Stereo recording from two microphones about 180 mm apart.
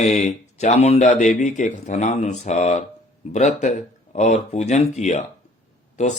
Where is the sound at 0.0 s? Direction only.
40° left (ahead or behind).